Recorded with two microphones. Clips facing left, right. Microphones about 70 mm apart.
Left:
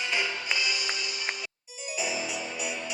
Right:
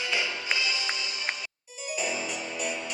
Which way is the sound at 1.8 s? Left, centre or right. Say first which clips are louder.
Right 1 dB; centre.